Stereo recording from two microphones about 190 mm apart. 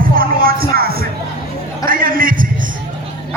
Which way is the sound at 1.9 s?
50° right (ahead or behind).